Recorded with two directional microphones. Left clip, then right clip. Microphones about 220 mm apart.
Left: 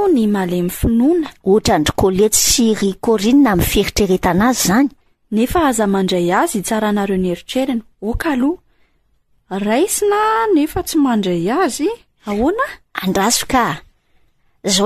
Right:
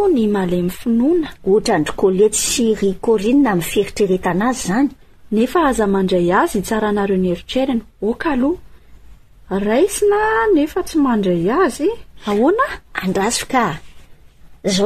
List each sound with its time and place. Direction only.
0.0 s speech: 35° left (ahead or behind)
5.3 s a woman's voice: 30° left (ahead or behind)
12.5 s speech: 10° left (ahead or behind)
12.9 s speech: 45° left (ahead or behind)